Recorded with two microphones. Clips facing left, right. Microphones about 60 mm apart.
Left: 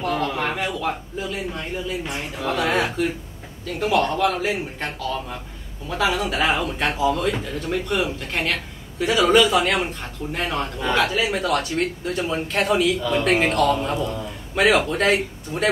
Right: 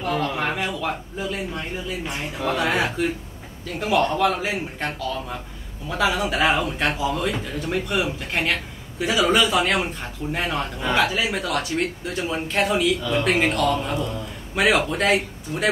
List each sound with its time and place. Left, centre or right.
0.0 s speech: centre